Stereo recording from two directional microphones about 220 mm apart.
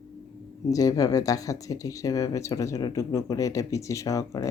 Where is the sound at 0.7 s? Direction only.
15° left (ahead or behind).